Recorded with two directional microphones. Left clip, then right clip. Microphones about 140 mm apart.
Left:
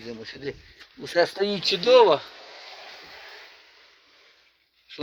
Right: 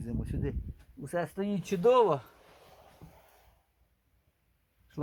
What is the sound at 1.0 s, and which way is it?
Speech, 20° left (ahead or behind).